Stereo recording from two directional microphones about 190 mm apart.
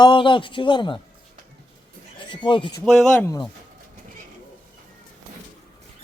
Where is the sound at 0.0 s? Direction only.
25° left (ahead or behind).